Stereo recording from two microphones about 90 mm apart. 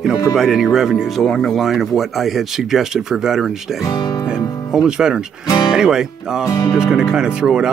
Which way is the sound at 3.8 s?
45° left (ahead or behind).